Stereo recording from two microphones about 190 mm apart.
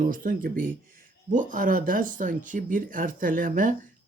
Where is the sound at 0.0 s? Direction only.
45° right (ahead or behind).